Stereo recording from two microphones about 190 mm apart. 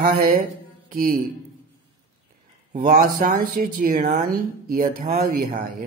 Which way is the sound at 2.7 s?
45° right (ahead or behind).